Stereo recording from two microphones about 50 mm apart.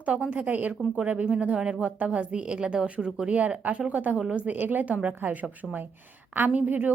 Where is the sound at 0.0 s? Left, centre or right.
Right.